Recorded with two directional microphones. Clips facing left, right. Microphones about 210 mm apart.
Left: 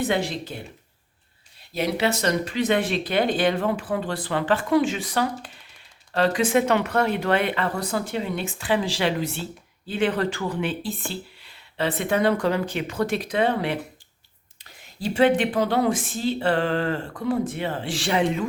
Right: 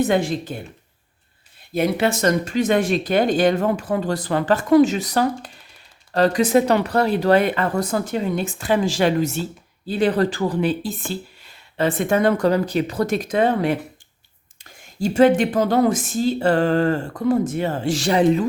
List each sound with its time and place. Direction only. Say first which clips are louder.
0.0 s speech: right 5 dB; 45° right (ahead or behind)
1.7 s speech: right 4 dB; 50° right (ahead or behind)